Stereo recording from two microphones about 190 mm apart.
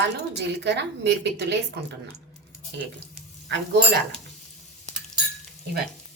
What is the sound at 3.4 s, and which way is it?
Speech, 65° right (ahead or behind).